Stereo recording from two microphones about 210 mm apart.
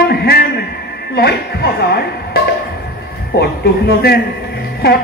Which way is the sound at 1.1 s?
50° left (ahead or behind).